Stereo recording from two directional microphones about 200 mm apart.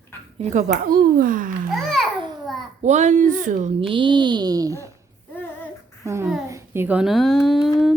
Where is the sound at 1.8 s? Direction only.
Centre (ahead or behind).